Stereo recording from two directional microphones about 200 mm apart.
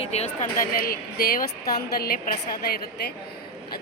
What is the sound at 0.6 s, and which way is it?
A woman's voice, 45° left (ahead or behind).